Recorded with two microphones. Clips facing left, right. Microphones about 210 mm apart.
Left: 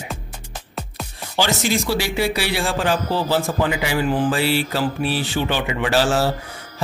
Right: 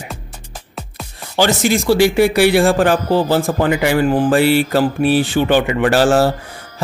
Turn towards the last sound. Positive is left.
turn(degrees=-50)  # may be behind; listen again after turning